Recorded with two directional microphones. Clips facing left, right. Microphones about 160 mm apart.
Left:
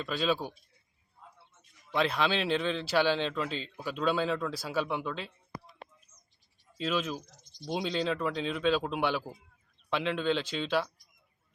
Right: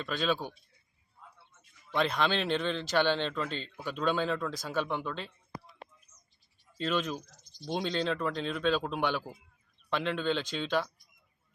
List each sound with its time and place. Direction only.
0.0 s speech: 5° left (ahead or behind)
1.9 s speech: 5° left (ahead or behind)
6.7 s speech: 5° left (ahead or behind)
7.3 s a sound: 20° left (ahead or behind)
7.7 s speech: 5° left (ahead or behind)